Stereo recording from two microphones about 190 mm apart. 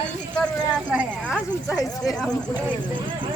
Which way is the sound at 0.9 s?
5° right (ahead or behind).